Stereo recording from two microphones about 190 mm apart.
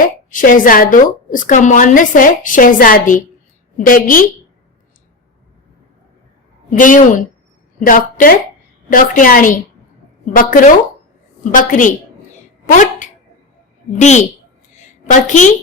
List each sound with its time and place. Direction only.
0.0 s a woman's voice: 45° left (ahead or behind)
6.7 s a woman's voice: 45° left (ahead or behind)